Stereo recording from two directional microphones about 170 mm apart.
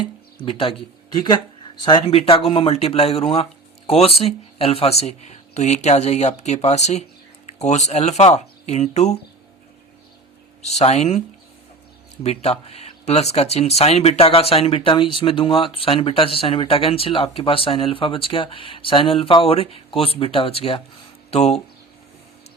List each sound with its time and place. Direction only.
0.4 s speech: 30° left (ahead or behind)
10.6 s speech: 40° left (ahead or behind)
12.2 s speech: 35° left (ahead or behind)
21.2 s a sound: 40° left (ahead or behind)